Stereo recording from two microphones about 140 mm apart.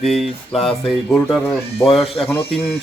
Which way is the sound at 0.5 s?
40° left (ahead or behind).